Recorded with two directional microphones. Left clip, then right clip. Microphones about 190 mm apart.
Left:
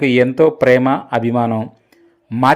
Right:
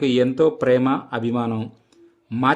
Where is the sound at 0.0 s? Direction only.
15° left (ahead or behind).